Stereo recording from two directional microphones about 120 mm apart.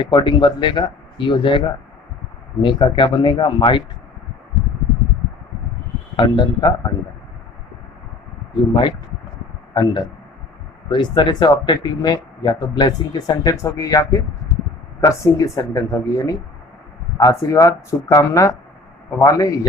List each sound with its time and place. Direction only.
0.0 s speech: 40° left (ahead or behind)
6.1 s speech: 40° left (ahead or behind)
9.7 s speech: 40° left (ahead or behind)